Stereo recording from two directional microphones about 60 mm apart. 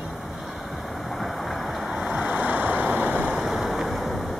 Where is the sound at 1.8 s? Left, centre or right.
Centre.